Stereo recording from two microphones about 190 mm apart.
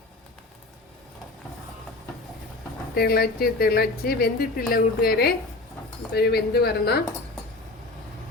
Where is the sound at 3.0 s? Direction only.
55° left (ahead or behind).